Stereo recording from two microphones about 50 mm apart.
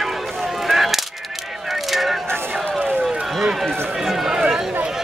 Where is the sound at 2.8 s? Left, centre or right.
Right.